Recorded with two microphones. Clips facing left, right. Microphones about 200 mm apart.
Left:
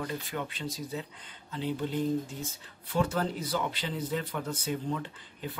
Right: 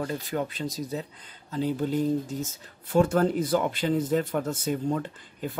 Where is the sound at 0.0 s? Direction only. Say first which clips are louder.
Right 6 dB; 40° right (ahead or behind).